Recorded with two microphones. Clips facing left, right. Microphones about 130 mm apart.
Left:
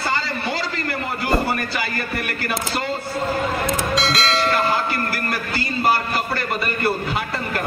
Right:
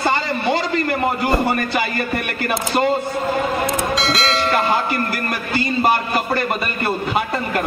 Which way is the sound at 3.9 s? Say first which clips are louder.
Right 1 dB; centre (ahead or behind).